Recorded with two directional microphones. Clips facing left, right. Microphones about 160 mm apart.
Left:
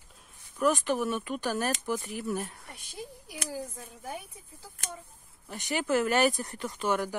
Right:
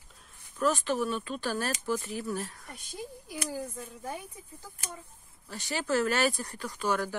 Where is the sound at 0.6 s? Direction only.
15° left (ahead or behind).